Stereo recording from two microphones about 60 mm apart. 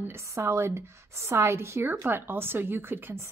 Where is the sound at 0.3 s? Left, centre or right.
Right.